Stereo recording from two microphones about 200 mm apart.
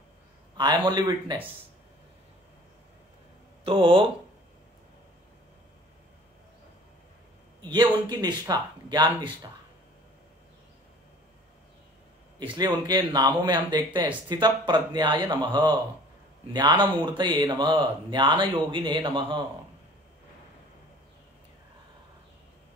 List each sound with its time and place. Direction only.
0.6 s speech: 20° right (ahead or behind)
3.6 s speech: 25° right (ahead or behind)
7.6 s speech: 20° right (ahead or behind)
12.5 s speech: 20° right (ahead or behind)